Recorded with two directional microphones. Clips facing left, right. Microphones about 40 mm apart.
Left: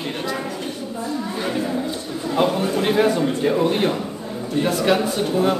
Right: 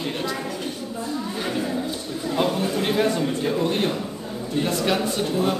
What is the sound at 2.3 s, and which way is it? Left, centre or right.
Speech, centre.